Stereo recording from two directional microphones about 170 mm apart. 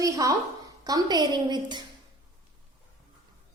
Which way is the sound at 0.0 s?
20° right (ahead or behind).